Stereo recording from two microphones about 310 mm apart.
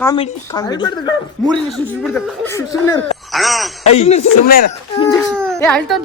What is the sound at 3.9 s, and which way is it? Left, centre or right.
Music, centre.